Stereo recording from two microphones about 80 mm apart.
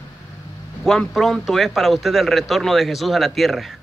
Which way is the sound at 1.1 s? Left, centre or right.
Centre.